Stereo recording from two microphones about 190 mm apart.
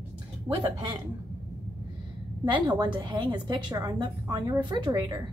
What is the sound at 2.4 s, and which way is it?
A woman's voice, 25° right (ahead or behind).